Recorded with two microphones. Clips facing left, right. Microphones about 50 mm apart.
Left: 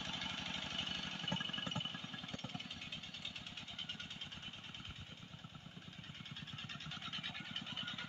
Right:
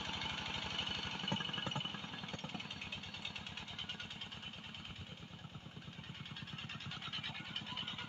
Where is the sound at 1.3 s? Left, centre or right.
Right.